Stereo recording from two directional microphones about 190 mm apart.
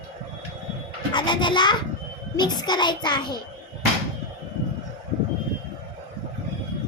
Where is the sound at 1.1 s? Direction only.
25° left (ahead or behind).